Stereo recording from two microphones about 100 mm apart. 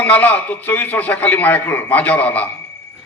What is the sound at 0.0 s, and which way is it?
A man's voice, 15° left (ahead or behind).